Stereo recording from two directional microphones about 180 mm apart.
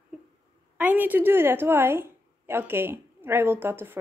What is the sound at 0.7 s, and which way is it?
A woman's voice, 10° right (ahead or behind).